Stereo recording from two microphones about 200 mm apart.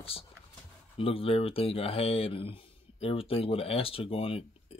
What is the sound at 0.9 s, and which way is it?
Speech, 30° left (ahead or behind).